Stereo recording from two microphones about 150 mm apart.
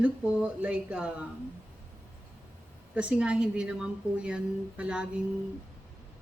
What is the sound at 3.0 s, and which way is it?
Speech, 5° right (ahead or behind).